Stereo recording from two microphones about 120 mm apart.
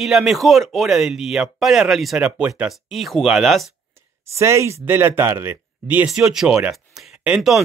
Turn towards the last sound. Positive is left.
turn(degrees=-5)  # may be behind; listen again after turning